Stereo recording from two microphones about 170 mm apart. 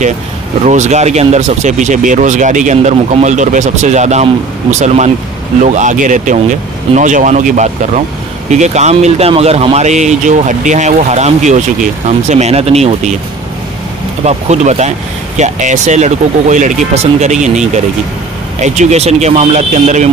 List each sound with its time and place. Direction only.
0.7 s speech: 45° right (ahead or behind)
14.2 s speech: 40° right (ahead or behind)